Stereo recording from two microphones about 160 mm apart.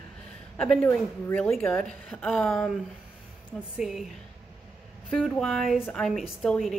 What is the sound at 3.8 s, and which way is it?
Speech, 5° right (ahead or behind).